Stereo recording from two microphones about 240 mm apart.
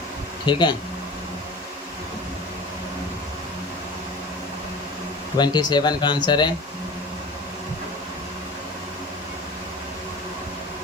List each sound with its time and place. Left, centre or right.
0.4 s speech: centre
5.4 s speech: centre